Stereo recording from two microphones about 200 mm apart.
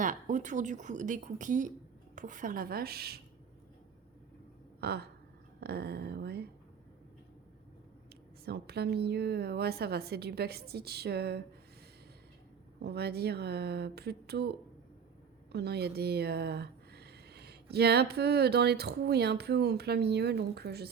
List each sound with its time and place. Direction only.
0.0 s speech: 40° right (ahead or behind)
4.8 s a sound: 55° right (ahead or behind)
5.5 s speech: 55° right (ahead or behind)
8.4 s speech: 55° right (ahead or behind)
12.8 s speech: 55° right (ahead or behind)
15.5 s speech: 55° right (ahead or behind)